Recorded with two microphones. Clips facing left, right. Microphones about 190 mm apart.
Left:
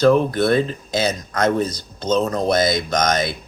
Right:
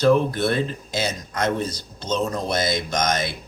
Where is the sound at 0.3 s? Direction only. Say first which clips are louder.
Left 5 dB; 40° left (ahead or behind).